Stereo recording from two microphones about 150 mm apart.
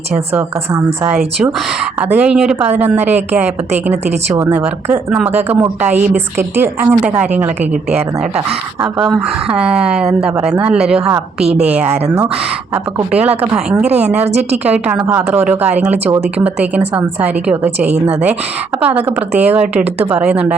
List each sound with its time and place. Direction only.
2.0 s a woman's voice: 10° right (ahead or behind)
9.0 s a woman's voice: 5° right (ahead or behind)
13.1 s a woman's voice: 10° right (ahead or behind)
17.9 s a woman's voice: 45° right (ahead or behind)
18.8 s a woman's voice: 10° right (ahead or behind)